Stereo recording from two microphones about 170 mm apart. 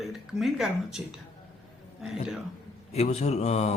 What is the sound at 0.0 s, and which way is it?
Speech, centre (ahead or behind).